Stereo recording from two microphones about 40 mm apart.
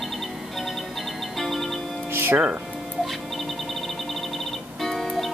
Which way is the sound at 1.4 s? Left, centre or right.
Centre.